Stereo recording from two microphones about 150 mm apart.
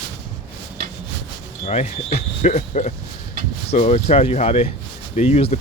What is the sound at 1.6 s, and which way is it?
Speech, 50° left (ahead or behind).